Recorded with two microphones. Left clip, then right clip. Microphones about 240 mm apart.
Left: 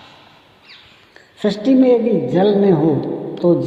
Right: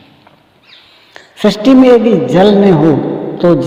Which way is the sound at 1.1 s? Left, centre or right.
Right.